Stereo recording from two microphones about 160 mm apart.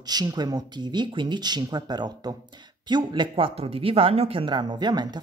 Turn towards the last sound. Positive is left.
turn(degrees=-25)  # may be behind; listen again after turning